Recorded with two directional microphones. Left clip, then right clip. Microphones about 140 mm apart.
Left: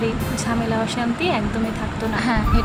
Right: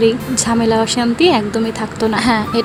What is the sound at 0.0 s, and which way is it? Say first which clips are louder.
A woman's voice: right 9 dB; 55° right (ahead or behind).